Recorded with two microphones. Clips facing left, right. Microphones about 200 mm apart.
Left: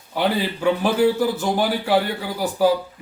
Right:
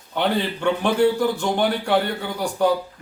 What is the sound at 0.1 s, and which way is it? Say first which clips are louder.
A man's voice: left 1 dB; 5° left (ahead or behind).